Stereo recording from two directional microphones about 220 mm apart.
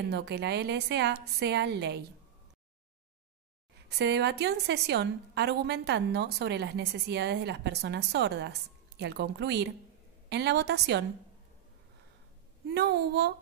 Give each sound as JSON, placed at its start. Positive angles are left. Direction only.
{"t": 0.1, "sound": "a woman's voice", "side_deg": -50}
{"t": 4.0, "sound": "a woman's voice", "side_deg": -50}
{"t": 12.7, "sound": "a woman's voice", "side_deg": -50}